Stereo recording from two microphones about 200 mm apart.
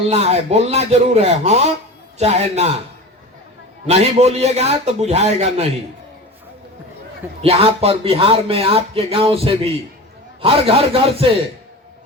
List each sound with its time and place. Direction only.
0.1 s a man's voice: 30° right (ahead or behind)
3.8 s a man's voice: 35° right (ahead or behind)
7.4 s speech: 30° right (ahead or behind)